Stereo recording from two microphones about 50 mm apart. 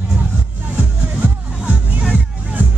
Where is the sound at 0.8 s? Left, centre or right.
Right.